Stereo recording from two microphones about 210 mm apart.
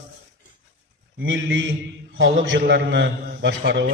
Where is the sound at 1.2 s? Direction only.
60° right (ahead or behind).